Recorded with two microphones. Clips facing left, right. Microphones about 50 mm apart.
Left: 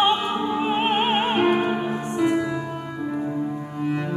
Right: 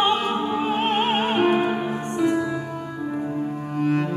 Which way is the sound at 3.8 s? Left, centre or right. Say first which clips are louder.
Right 4 dB; right.